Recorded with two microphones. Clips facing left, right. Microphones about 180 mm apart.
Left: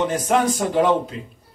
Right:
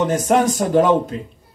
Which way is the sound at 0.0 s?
45° right (ahead or behind).